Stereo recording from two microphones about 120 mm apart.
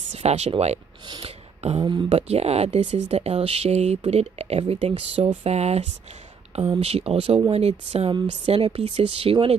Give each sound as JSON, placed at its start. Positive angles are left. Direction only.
{"t": 0.1, "sound": "speech", "side_deg": -65}
{"t": 1.2, "sound": "a sound", "side_deg": -60}
{"t": 1.8, "sound": "speech", "side_deg": -40}
{"t": 2.0, "sound": "speech", "side_deg": -60}